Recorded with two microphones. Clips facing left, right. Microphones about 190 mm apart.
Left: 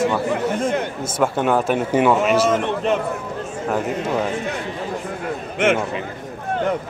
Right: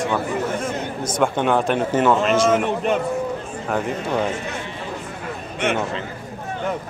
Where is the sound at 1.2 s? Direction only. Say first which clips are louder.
Left 1 dB; 5° left (ahead or behind).